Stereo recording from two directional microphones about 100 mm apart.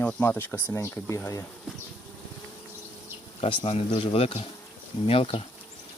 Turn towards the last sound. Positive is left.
turn(degrees=70)  # may be behind; listen again after turning